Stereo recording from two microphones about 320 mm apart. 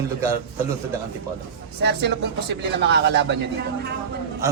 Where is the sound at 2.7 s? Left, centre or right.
Right.